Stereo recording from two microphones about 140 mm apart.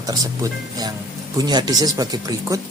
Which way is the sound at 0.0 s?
25° right (ahead or behind).